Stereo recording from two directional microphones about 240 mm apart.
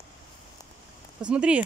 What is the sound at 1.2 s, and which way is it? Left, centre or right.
Speech, centre.